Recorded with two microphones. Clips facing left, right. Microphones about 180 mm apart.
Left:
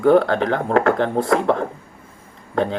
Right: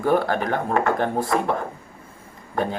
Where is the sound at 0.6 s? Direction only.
90° left.